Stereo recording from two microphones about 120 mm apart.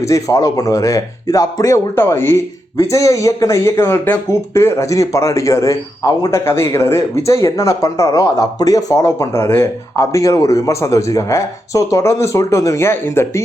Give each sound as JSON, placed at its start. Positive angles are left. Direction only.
{"t": 0.1, "sound": "speech", "side_deg": 30}